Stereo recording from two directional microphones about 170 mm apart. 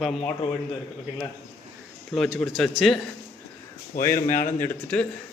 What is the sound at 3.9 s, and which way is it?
Speech, 60° left (ahead or behind).